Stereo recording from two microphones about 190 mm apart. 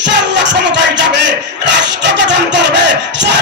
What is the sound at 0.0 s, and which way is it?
Music, 65° right (ahead or behind).